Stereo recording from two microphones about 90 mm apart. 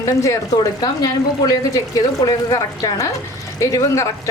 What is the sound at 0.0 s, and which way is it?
Speech, 35° left (ahead or behind).